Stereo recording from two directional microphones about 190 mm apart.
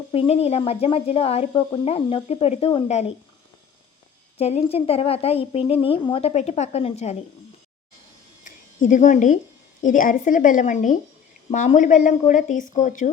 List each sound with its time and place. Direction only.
0.1 s speech: 30° left (ahead or behind)
4.4 s speech: 35° left (ahead or behind)
8.4 s speech: 40° left (ahead or behind)